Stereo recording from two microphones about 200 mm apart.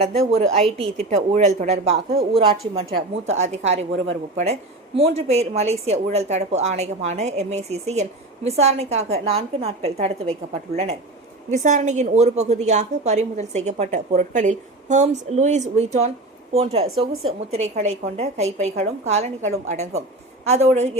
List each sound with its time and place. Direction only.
0.3 s a woman's voice: 35° right (ahead or behind)
3.2 s a woman's voice: 35° right (ahead or behind)